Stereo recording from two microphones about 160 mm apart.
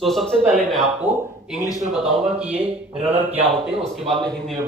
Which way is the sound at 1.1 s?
15° right (ahead or behind).